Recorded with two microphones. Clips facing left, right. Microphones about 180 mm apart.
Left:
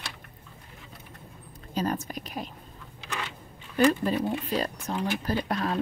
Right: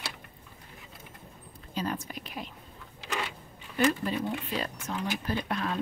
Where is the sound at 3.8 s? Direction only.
40° left (ahead or behind).